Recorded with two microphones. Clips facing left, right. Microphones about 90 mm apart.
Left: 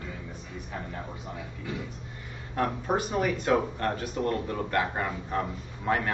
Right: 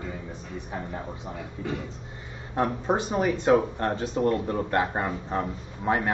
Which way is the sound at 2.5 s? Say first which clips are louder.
Right 3 dB; 25° right (ahead or behind).